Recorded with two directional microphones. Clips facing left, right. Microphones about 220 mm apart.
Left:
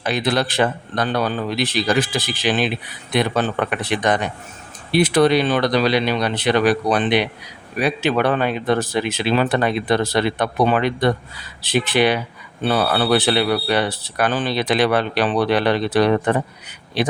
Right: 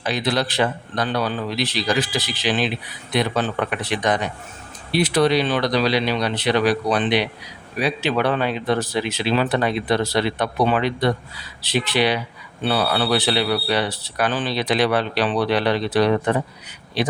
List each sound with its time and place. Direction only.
0.0 s speech: 50° left (ahead or behind)